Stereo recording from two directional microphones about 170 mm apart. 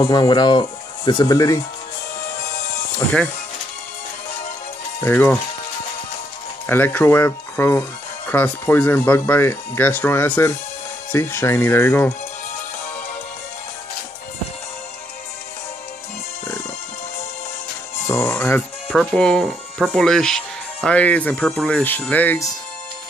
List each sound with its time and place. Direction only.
0.0 s speech: 25° left (ahead or behind)
5.0 s speech: 10° left (ahead or behind)
6.7 s speech: 10° left (ahead or behind)
18.0 s music: 15° left (ahead or behind)
18.9 s speech: centre (ahead or behind)